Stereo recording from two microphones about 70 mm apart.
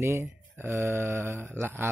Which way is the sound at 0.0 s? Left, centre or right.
Right.